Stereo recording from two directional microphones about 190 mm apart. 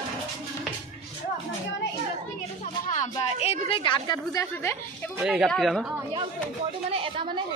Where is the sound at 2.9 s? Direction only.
35° left (ahead or behind); by 4.7 s 15° left (ahead or behind).